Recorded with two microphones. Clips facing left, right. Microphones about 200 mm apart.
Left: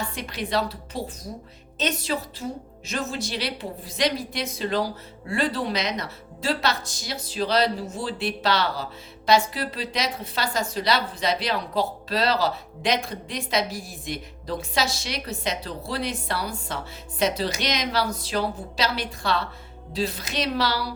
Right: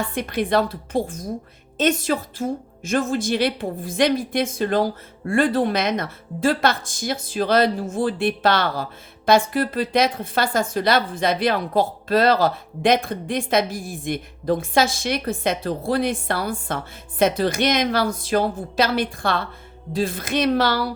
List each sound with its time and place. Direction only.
0.1 s a woman's voice: 55° right (ahead or behind)